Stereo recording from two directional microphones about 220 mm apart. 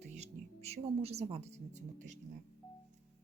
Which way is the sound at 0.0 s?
30° right (ahead or behind).